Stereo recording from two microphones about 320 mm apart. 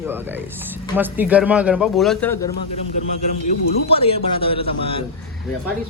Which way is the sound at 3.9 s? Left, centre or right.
Centre.